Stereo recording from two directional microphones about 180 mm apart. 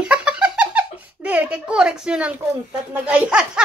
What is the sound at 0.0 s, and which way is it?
Giggle, 5° right (ahead or behind).